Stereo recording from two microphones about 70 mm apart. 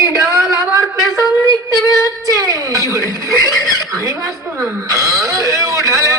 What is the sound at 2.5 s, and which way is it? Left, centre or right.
Speech, right.